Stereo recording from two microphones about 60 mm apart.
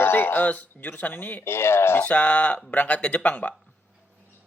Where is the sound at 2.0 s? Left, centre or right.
Left.